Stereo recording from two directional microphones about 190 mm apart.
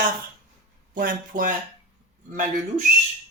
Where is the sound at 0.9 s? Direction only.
45° right (ahead or behind).